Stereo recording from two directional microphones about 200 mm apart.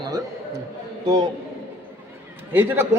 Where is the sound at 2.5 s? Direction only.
10° right (ahead or behind).